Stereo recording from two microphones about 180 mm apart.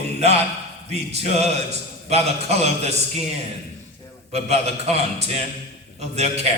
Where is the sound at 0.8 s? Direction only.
35° right (ahead or behind).